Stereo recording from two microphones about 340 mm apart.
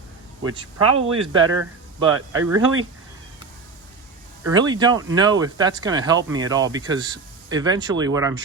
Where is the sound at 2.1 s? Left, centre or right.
Right.